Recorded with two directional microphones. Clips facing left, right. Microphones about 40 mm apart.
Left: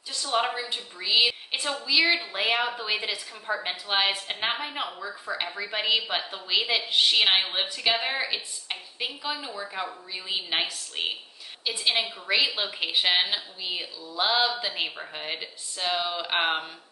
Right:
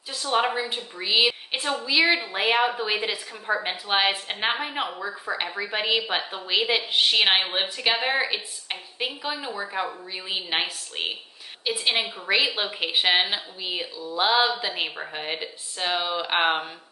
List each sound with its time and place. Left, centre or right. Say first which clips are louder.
0.1 s a woman's voice: right 3 dB; right
4.8 s a woman's voice: right 4 dB; right; by 7.3 s centre
7.3 s a woman's voice: right 2 dB; right
8.3 s speech: right 2 dB; centre
11.6 s a woman's voice: right 2 dB; centre
12.9 s a woman's voice: right 2 dB; right